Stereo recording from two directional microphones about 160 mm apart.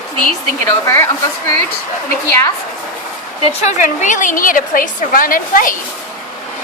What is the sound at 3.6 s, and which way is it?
A woman's voice, 50° left (ahead or behind).